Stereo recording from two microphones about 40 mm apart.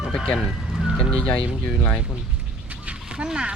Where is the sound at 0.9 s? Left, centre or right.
Left.